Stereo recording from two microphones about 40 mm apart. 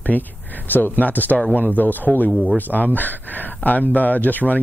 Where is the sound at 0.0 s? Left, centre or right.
Left.